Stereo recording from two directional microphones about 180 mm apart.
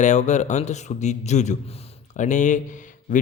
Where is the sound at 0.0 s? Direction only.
40° left (ahead or behind).